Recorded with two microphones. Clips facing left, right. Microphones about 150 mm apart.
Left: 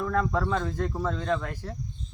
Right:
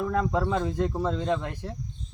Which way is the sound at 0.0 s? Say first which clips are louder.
Right 1 dB; 15° right (ahead or behind).